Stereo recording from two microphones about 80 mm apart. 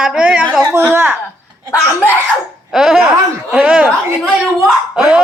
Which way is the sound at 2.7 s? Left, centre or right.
Centre.